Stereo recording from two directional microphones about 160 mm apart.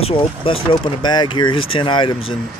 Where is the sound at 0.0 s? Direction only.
35° left (ahead or behind).